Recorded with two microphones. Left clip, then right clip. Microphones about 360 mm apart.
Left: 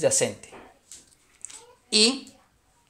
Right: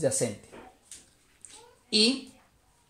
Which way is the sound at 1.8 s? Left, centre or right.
Centre.